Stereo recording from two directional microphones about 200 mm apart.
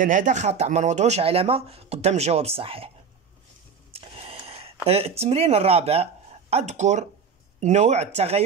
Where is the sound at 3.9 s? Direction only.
30° right (ahead or behind).